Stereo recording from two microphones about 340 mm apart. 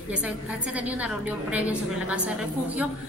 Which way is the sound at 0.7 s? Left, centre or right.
Centre.